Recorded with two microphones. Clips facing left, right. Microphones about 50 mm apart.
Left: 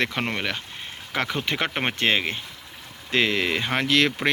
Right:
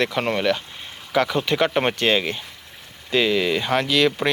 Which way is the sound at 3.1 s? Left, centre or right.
Left.